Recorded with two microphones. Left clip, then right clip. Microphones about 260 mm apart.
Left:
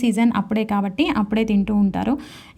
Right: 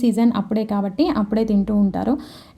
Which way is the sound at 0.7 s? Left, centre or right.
Left.